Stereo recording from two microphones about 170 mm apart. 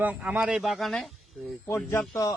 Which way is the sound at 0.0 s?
10° right (ahead or behind).